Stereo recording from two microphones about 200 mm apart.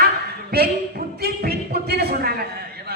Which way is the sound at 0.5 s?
50° right (ahead or behind).